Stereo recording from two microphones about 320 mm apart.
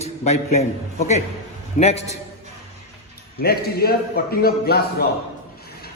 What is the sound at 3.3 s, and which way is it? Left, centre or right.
A man's voice, left.